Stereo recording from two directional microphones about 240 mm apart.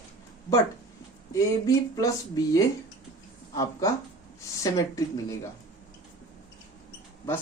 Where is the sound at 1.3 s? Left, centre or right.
Centre.